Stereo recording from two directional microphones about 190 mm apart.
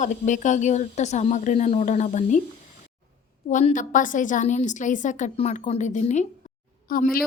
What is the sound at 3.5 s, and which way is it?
A woman's voice, 40° left (ahead or behind).